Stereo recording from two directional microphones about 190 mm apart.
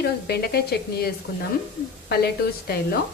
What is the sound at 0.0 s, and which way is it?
A woman's voice, 55° left (ahead or behind).